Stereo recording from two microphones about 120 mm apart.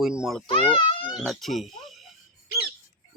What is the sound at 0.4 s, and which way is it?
Speech, 45° left (ahead or behind).